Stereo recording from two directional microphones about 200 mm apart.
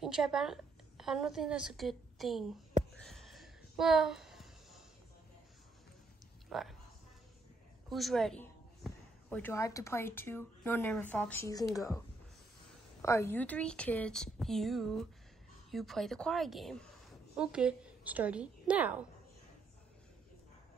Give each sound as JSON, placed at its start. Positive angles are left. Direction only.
{"t": 0.0, "sound": "a woman's voice", "side_deg": 0}
{"t": 3.1, "sound": "a sound", "side_deg": 0}
{"t": 6.5, "sound": "speech", "side_deg": 0}
{"t": 7.9, "sound": "a woman's voice", "side_deg": 0}
{"t": 13.0, "sound": "a woman's voice", "side_deg": 15}